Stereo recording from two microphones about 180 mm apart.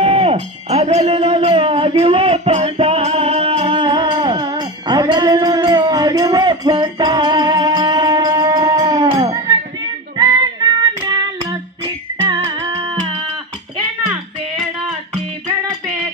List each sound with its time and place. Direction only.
0.0 s music: 35° right (ahead or behind)
10.1 s child singing: 25° right (ahead or behind)
12.4 s music: 25° right (ahead or behind)